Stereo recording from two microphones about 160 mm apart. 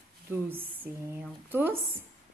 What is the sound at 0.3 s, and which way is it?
Speech, 15° right (ahead or behind).